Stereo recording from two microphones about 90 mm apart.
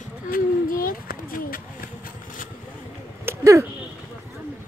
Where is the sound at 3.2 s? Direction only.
35° right (ahead or behind).